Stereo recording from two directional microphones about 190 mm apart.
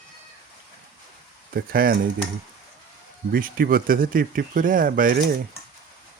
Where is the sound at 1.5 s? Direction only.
55° right (ahead or behind).